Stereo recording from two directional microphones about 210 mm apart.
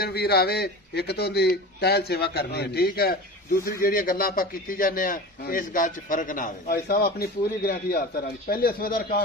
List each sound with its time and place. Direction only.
0.0 s a man's voice: 50° left (ahead or behind)